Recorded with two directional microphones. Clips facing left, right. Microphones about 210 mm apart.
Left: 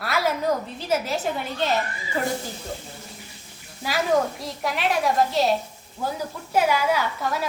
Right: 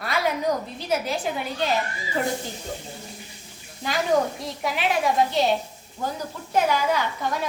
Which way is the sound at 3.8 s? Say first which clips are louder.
Even; 5° left (ahead or behind).